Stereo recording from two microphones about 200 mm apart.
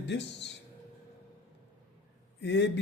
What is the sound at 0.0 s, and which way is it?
Speech, 60° left (ahead or behind).